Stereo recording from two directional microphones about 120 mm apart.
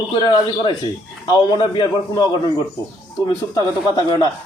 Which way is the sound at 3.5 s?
30° left (ahead or behind).